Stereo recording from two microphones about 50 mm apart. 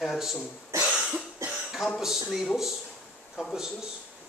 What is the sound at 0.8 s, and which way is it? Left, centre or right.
Cough, right.